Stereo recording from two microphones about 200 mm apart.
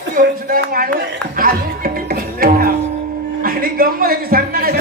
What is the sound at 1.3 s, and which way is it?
Music, 45° right (ahead or behind).